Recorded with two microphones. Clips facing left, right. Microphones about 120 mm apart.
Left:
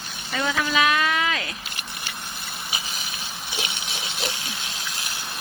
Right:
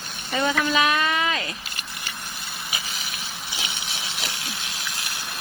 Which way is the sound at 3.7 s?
20° left (ahead or behind).